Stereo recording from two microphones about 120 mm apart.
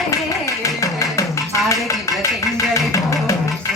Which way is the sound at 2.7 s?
25° left (ahead or behind).